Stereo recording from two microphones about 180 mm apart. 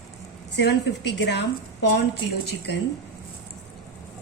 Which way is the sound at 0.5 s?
70° left (ahead or behind).